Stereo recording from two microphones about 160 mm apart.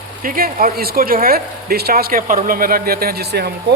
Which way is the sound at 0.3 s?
65° right (ahead or behind).